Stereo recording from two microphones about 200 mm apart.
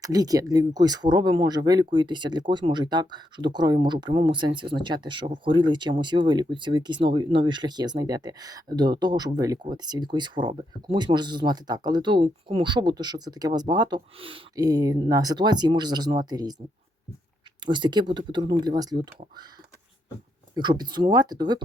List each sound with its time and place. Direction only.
0.0 s speech: 20° right (ahead or behind)
17.7 s speech: 25° right (ahead or behind)
20.6 s speech: 20° right (ahead or behind)